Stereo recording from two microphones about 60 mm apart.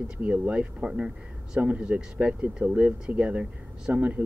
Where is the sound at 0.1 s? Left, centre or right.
Centre.